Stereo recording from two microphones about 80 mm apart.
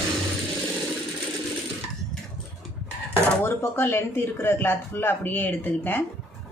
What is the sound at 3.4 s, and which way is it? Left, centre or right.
Speech, left.